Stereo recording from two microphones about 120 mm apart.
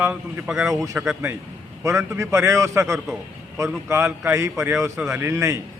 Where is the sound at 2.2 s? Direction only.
25° right (ahead or behind).